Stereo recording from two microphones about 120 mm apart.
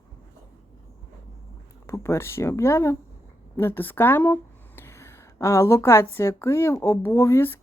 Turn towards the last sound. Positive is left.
turn(degrees=20)  # may be behind; listen again after turning